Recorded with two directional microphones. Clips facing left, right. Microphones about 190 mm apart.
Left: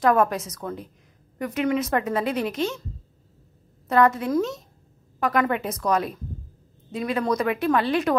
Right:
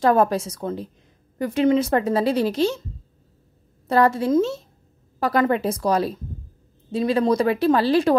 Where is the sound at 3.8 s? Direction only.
30° right (ahead or behind).